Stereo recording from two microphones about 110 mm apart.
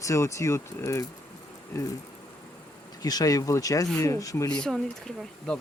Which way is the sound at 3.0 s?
35° left (ahead or behind).